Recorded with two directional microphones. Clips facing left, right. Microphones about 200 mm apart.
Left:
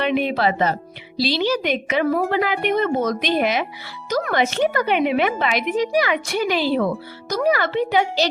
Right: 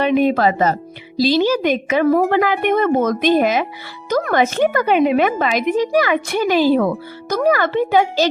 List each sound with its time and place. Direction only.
0.0 s speech: 45° right (ahead or behind)